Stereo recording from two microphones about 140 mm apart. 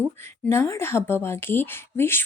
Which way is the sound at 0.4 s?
15° left (ahead or behind).